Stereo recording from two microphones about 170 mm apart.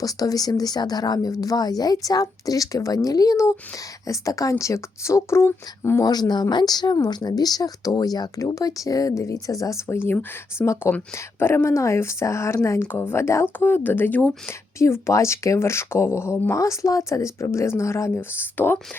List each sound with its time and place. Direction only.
0.0 s speech: 20° left (ahead or behind)